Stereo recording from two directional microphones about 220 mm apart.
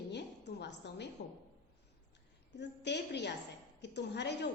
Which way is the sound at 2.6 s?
50° left (ahead or behind).